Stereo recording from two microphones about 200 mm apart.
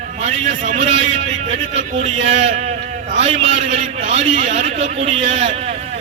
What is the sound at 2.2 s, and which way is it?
Speech, 70° right (ahead or behind).